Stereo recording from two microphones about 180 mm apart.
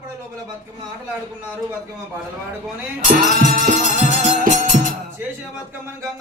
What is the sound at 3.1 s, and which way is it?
Music, 50° right (ahead or behind).